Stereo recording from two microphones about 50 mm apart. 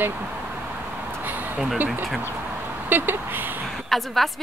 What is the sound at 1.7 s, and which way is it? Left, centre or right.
Speech, right.